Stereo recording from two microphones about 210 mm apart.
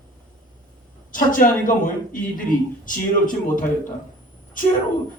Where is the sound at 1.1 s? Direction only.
40° left (ahead or behind).